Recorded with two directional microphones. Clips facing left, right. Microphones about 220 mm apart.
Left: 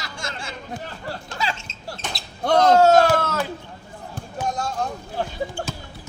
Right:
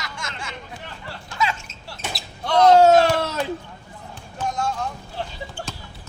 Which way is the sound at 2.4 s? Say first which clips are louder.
Left 1 dB; 50° left (ahead or behind).